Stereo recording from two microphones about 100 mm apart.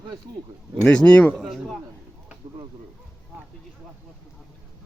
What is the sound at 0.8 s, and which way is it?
Speech, 10° left (ahead or behind).